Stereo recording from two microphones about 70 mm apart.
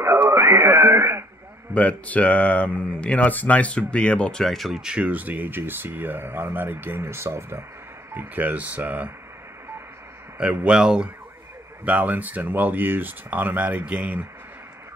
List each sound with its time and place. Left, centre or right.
0.3 s radio: right
1.7 s speech: centre
4.8 s speech: centre; by 7.6 s right
8.1 s speech: right
10.3 s speech: centre